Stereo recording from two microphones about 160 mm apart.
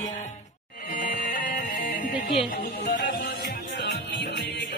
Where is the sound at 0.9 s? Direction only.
60° left (ahead or behind).